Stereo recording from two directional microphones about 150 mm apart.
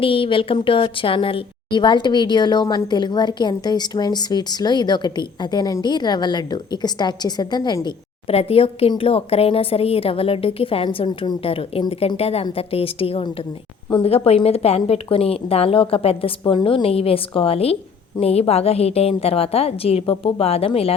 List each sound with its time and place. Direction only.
0.0 s a woman's voice: 35° left (ahead or behind)
8.3 s speech: 40° left (ahead or behind)